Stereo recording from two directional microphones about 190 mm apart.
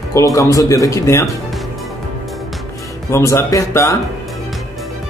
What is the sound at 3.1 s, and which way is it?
Speech, 15° left (ahead or behind).